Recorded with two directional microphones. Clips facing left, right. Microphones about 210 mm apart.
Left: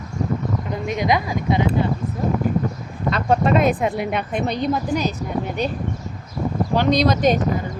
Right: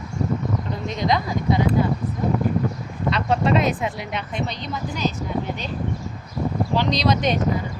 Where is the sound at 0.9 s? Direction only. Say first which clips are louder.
Left 2 dB; 15° left (ahead or behind).